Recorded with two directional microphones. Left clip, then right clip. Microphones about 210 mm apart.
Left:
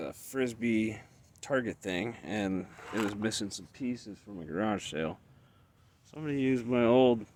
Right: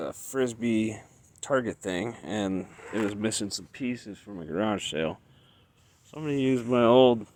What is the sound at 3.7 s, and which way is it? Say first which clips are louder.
Speech: right 4 dB; 30° right (ahead or behind).